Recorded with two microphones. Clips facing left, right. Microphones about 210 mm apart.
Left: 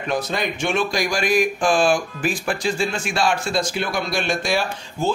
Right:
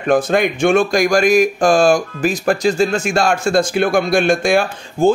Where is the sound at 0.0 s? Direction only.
50° right (ahead or behind).